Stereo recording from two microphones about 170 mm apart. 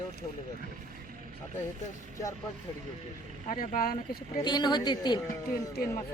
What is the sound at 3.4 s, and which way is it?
Speech, 45° left (ahead or behind).